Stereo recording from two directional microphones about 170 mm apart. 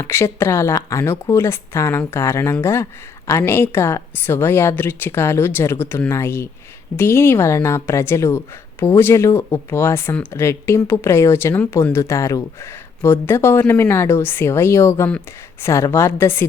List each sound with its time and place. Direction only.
0.0 s speech: 15° left (ahead or behind)